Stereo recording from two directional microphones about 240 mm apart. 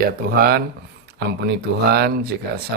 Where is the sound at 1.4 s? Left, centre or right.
Right.